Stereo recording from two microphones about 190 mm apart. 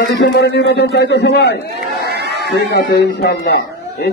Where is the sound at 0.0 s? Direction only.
55° left (ahead or behind).